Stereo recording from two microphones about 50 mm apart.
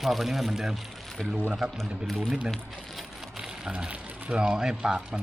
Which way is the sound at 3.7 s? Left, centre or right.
Right.